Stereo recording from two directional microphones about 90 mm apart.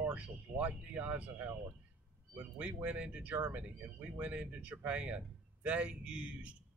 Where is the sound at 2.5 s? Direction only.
15° right (ahead or behind).